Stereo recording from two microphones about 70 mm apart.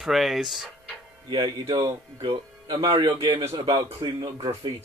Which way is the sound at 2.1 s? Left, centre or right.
Right.